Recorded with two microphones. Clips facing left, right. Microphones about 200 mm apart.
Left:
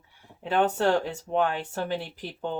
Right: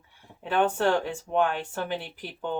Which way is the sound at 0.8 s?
40° left (ahead or behind).